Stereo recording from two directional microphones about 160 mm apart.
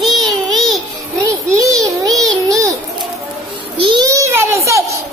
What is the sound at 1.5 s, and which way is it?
Child singing, 20° right (ahead or behind).